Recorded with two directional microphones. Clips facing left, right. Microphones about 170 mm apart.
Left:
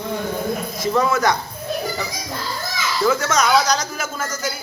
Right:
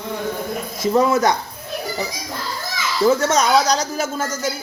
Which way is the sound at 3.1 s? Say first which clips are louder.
Right 2 dB; 35° right (ahead or behind).